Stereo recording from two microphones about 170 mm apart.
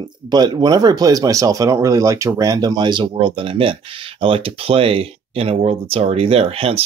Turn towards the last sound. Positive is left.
turn(degrees=-35)  # may be behind; listen again after turning